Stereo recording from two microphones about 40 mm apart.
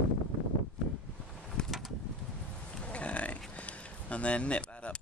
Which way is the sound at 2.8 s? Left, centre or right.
Left.